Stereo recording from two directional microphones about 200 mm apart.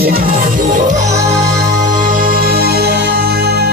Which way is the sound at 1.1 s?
15° right (ahead or behind).